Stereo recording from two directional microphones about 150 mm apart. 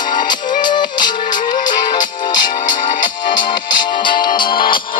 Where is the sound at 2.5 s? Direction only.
65° left (ahead or behind).